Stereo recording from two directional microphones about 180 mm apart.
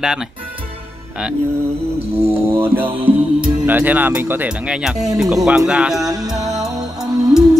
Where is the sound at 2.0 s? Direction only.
35° right (ahead or behind).